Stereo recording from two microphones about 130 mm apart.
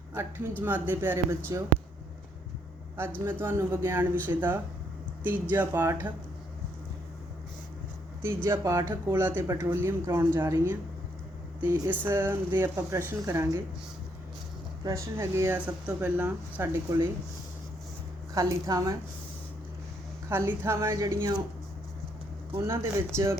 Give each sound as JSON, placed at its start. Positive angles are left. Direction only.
{"t": 0.1, "sound": "speech", "side_deg": -20}
{"t": 3.2, "sound": "speech", "side_deg": -15}
{"t": 8.4, "sound": "speech", "side_deg": -25}
{"t": 14.8, "sound": "speech", "side_deg": -25}
{"t": 18.3, "sound": "speech", "side_deg": -25}
{"t": 20.3, "sound": "speech", "side_deg": -20}
{"t": 22.6, "sound": "speech", "side_deg": -20}